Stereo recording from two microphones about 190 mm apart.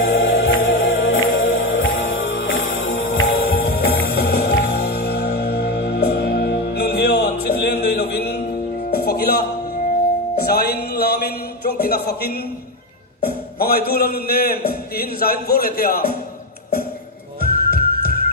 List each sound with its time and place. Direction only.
0.0 s music: 75° left (ahead or behind)
3.7 s music: 55° left (ahead or behind)
13.6 s a sound: 55° left (ahead or behind)
17.4 s music: 55° left (ahead or behind)